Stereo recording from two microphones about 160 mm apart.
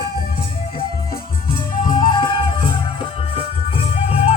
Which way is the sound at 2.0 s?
30° left (ahead or behind).